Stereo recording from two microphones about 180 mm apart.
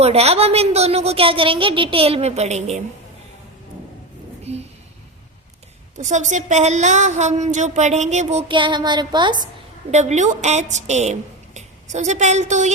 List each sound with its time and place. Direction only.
0.0 s a woman's voice: 35° right (ahead or behind)
4.5 s a sound: 35° right (ahead or behind)
6.0 s a woman's voice: 40° right (ahead or behind)
8.4 s child singing: 25° right (ahead or behind)
9.9 s speech: 40° right (ahead or behind)